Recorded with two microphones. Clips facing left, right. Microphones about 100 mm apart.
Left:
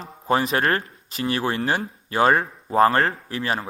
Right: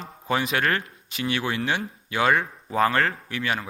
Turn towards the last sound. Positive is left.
turn(degrees=35)  # may be behind; listen again after turning